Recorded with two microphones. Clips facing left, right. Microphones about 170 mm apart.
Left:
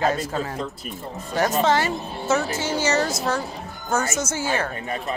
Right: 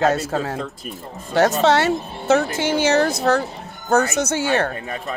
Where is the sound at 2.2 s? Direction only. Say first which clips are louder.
Right 5 dB; 60° right (ahead or behind).